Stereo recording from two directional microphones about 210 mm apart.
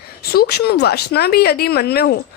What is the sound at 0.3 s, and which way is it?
Speech, 50° left (ahead or behind).